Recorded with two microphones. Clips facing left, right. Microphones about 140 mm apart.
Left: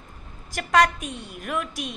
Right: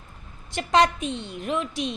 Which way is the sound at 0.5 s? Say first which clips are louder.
Even; 25° right (ahead or behind).